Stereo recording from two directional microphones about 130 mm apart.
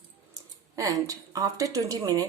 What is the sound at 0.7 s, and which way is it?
A woman's voice, 25° right (ahead or behind).